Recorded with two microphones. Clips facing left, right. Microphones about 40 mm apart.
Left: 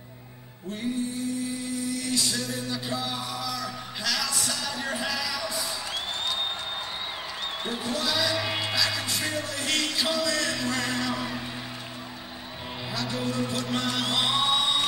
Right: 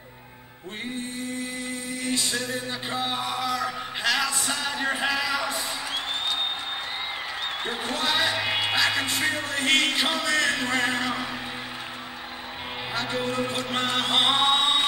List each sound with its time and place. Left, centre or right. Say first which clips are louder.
1.9 s music: right 2 dB; right
7.6 s music: right 1 dB; right
12.9 s chant: right 2 dB; right